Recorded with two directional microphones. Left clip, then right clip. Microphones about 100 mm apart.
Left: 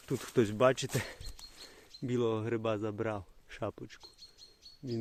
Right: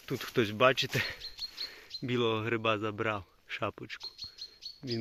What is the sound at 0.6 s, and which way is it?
Speech, 35° left (ahead or behind).